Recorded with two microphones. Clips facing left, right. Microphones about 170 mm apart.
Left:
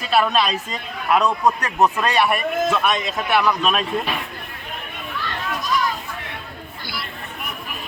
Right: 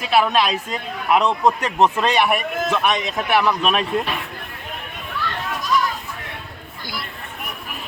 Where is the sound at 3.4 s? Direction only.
10° right (ahead or behind).